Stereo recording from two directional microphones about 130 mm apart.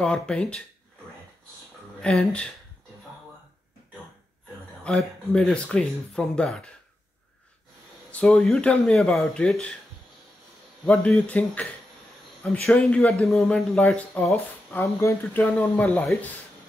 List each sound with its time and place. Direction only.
0.0 s speech: 5° left (ahead or behind)
2.0 s speech: 5° left (ahead or behind)
4.8 s speech: 5° left (ahead or behind)
8.1 s speech: 5° left (ahead or behind)
10.9 s speech: 5° left (ahead or behind)
14.8 s speech: 20° left (ahead or behind)